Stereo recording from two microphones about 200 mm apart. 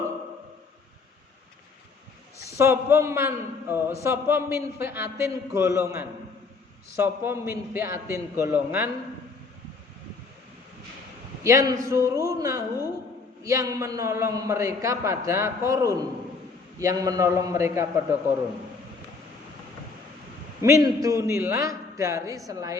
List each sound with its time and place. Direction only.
2.5 s a man's voice: 15° right (ahead or behind)
11.4 s a man's voice: 15° right (ahead or behind)
20.6 s a man's voice: 15° right (ahead or behind)